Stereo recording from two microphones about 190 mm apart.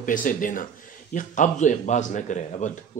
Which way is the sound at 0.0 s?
45° left (ahead or behind).